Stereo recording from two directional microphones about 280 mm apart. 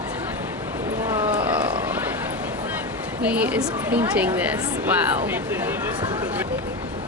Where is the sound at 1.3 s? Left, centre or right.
Centre.